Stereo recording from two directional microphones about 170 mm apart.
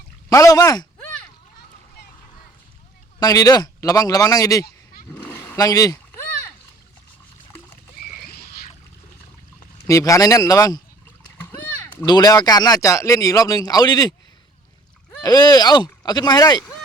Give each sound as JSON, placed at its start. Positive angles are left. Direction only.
{"t": 0.3, "sound": "speech", "side_deg": 20}
{"t": 3.2, "sound": "speech", "side_deg": 20}
{"t": 5.1, "sound": "roaring cats", "side_deg": 10}
{"t": 9.8, "sound": "speech", "side_deg": 20}
{"t": 11.4, "sound": "a sound", "side_deg": 15}
{"t": 12.0, "sound": "speech", "side_deg": 25}
{"t": 15.2, "sound": "speech", "side_deg": 25}